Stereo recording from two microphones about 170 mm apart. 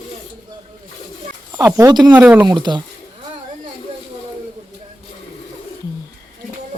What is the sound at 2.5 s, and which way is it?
Speech, 25° right (ahead or behind).